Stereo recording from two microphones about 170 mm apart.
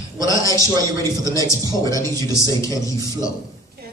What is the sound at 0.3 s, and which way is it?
A man's voice, 20° left (ahead or behind).